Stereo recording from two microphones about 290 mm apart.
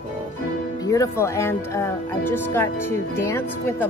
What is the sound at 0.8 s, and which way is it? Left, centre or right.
Music, centre.